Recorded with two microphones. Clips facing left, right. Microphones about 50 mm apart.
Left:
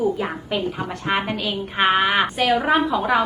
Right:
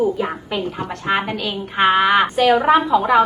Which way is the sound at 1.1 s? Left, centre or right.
Centre.